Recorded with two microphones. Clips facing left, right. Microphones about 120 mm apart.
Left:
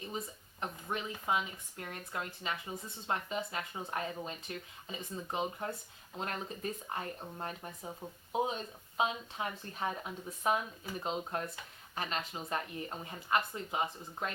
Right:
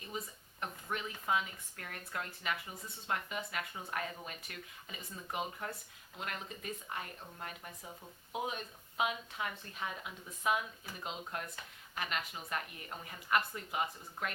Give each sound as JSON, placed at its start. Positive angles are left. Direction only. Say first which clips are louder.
{"t": 0.6, "sound": "a woman's voice", "louder": "left 2 dB", "side_deg": 20}